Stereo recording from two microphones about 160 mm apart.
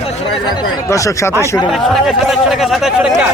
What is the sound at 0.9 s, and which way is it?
Speech, 20° left (ahead or behind).